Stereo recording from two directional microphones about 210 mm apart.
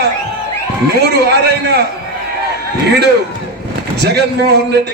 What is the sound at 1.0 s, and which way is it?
Speech, 50° right (ahead or behind).